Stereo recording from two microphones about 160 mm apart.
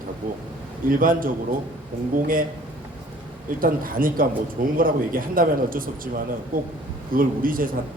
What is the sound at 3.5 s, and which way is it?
A man's voice, 60° right (ahead or behind).